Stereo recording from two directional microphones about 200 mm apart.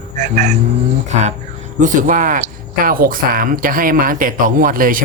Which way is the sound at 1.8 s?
40° right (ahead or behind).